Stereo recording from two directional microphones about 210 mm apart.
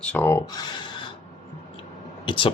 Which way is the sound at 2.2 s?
25° left (ahead or behind).